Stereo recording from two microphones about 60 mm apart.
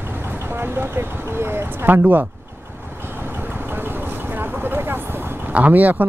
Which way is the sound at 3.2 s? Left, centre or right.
Right.